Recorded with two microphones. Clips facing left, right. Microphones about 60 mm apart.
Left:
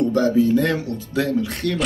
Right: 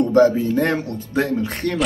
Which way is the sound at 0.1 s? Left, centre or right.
Right.